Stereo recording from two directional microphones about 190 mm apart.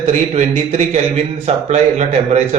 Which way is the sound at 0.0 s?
35° right (ahead or behind).